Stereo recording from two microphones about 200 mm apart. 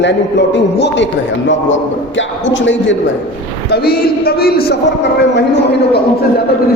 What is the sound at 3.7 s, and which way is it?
A man's voice, 50° left (ahead or behind).